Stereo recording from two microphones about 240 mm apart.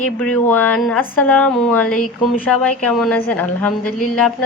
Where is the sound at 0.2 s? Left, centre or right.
Centre.